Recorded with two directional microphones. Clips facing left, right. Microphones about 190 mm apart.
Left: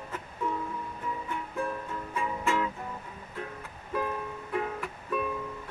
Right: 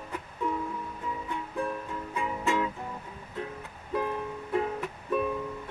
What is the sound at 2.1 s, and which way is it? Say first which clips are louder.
Music: right 1 dB; 15° right (ahead or behind).